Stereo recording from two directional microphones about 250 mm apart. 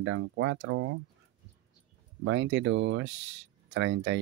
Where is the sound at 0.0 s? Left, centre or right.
Right.